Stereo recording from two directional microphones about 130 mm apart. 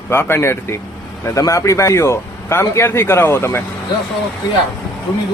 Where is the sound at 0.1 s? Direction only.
20° left (ahead or behind).